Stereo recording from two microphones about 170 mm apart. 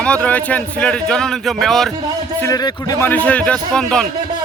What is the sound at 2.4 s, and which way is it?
Speech, 20° left (ahead or behind).